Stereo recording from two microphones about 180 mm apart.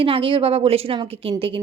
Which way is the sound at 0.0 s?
30° right (ahead or behind).